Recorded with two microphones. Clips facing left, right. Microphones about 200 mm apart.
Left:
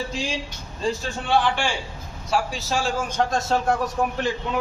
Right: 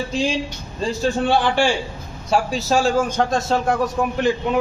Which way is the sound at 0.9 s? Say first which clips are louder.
Right 5 dB; 35° right (ahead or behind).